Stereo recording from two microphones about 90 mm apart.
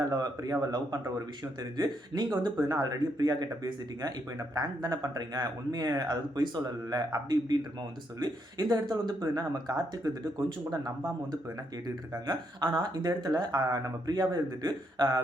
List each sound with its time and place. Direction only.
0.1 s speech: 45° right (ahead or behind)
1.7 s speech: 55° right (ahead or behind)
12.1 s speech: 45° right (ahead or behind)